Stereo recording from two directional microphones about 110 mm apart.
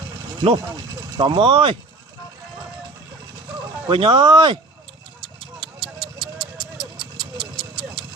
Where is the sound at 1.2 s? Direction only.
50° right (ahead or behind).